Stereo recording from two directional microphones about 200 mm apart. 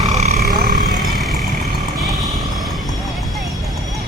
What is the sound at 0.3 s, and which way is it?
Vehicle, 50° right (ahead or behind).